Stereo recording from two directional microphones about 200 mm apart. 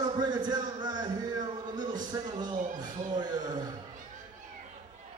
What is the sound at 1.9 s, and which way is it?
Speech, 20° right (ahead or behind).